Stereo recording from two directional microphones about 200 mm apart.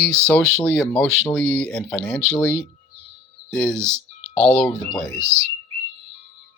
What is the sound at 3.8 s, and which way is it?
Speech, 15° right (ahead or behind).